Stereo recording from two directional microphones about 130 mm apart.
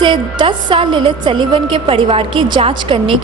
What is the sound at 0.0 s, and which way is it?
A woman's voice, 40° right (ahead or behind).